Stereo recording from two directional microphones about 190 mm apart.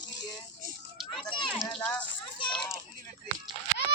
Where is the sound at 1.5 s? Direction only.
5° left (ahead or behind).